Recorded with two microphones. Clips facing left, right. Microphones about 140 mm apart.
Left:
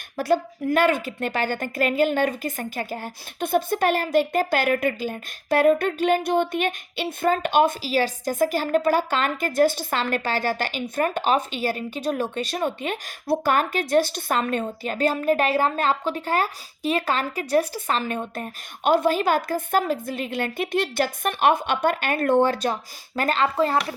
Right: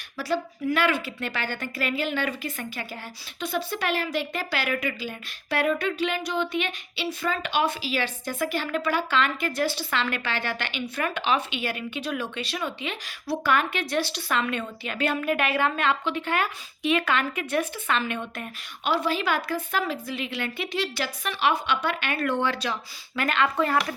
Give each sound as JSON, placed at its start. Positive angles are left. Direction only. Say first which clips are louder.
{"t": 0.2, "sound": "a woman's voice", "louder": "left 5 dB", "side_deg": 50}